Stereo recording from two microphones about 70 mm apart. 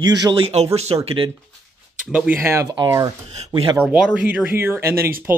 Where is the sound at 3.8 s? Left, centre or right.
Centre.